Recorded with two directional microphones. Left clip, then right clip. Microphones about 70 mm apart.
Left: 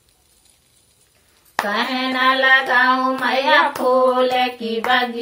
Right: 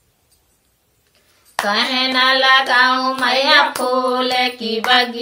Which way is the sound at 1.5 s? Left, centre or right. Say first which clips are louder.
Right 3 dB; right.